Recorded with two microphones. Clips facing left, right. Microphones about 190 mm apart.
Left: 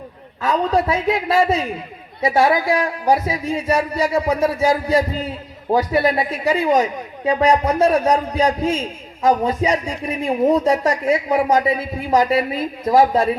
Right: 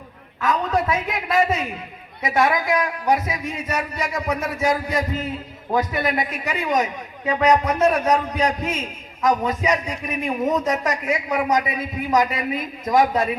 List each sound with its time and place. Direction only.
0.4 s a man's voice: 30° left (ahead or behind)